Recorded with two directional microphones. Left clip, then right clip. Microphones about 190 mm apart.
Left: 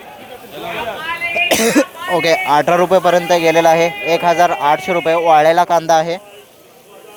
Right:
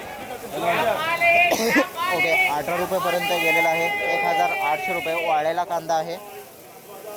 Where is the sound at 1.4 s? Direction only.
45° left (ahead or behind).